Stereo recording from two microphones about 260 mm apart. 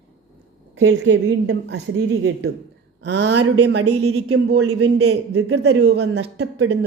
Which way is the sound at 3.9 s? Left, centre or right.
Right.